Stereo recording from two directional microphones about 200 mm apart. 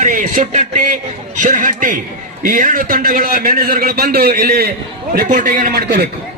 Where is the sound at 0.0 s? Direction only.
40° right (ahead or behind).